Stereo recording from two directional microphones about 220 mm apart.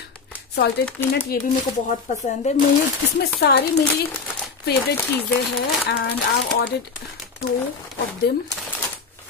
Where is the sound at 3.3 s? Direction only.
45° left (ahead or behind).